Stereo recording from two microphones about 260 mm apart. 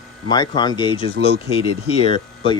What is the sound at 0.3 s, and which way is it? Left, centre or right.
Speech, centre.